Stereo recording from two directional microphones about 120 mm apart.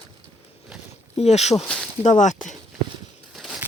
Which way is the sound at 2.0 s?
90° left.